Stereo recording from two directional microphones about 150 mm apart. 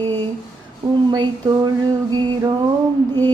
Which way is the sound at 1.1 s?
30° right (ahead or behind).